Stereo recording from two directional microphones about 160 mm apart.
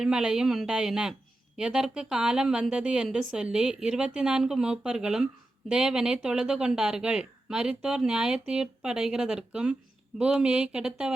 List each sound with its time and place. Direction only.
0.0 s speech: 5° right (ahead or behind)